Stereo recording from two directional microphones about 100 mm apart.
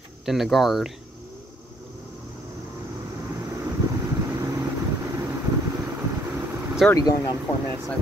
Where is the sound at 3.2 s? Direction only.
25° right (ahead or behind).